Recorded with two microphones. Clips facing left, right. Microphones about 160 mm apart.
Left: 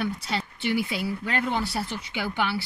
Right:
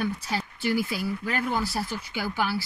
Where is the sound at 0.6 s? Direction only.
65° left (ahead or behind).